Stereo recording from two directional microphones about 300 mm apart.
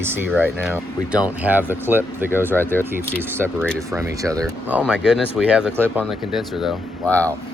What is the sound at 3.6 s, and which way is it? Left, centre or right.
Speech, centre.